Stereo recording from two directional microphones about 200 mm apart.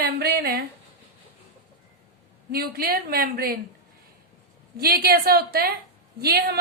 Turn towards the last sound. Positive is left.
turn(degrees=-50)  # may be behind; listen again after turning